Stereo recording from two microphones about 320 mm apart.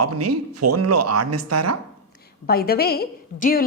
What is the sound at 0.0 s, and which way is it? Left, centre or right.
Speech, right.